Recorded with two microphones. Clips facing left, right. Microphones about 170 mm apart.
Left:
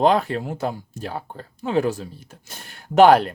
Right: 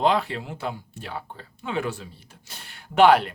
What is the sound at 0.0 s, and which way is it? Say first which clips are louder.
Speech: left 4 dB; 45° left (ahead or behind).